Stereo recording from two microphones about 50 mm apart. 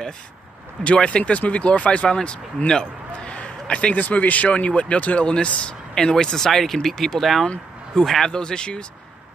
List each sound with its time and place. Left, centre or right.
0.8 s speech: left
4.0 s speech: left; by 8.3 s centre
8.3 s speech: centre